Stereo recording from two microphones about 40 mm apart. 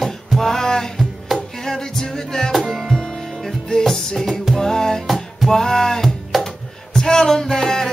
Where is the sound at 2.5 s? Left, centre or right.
Centre.